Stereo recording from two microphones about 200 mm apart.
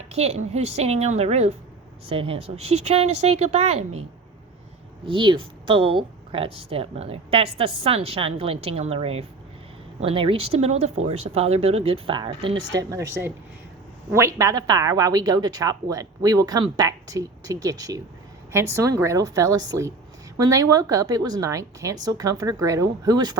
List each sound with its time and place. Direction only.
0.1 s speech: 30° right (ahead or behind)
5.0 s a woman's voice: 25° right (ahead or behind)